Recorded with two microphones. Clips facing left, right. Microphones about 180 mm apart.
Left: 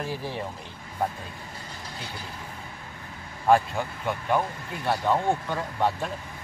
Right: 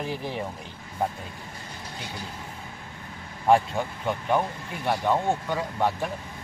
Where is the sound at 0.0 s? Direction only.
20° right (ahead or behind).